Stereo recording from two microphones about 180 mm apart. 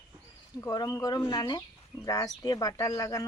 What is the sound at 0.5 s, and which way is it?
Speech, 20° left (ahead or behind).